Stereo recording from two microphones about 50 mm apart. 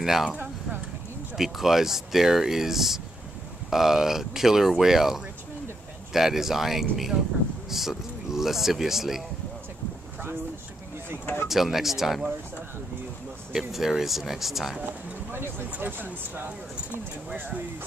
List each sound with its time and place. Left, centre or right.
0.0 s speech: centre
1.3 s speech: centre
11.4 s speech: centre
13.5 s speech: centre
15.3 s speech: right